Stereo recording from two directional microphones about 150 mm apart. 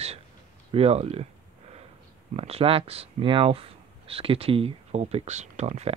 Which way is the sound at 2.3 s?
40° right (ahead or behind).